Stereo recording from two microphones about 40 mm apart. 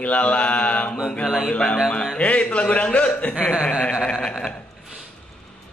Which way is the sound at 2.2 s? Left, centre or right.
Left.